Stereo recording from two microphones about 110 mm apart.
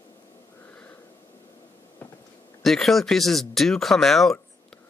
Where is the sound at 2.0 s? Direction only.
20° left (ahead or behind).